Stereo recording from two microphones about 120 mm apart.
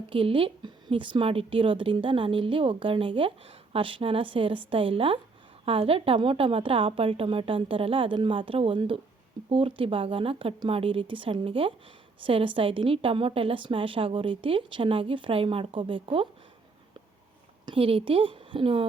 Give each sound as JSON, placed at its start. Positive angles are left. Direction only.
{"t": 0.1, "sound": "a woman's voice", "side_deg": -45}
{"t": 17.7, "sound": "speech", "side_deg": -50}